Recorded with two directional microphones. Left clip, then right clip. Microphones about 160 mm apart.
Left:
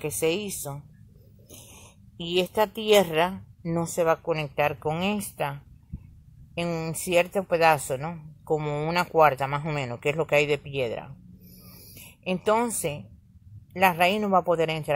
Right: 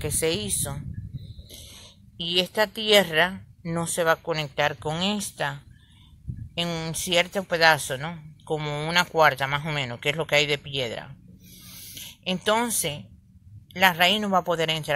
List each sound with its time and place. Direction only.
0.0 s speech: 5° left (ahead or behind)
6.7 s speech: 15° left (ahead or behind)
9.0 s speech: centre (ahead or behind)
9.3 s speech: 15° left (ahead or behind)
13.7 s speech: 15° left (ahead or behind)
14.2 s speech: centre (ahead or behind)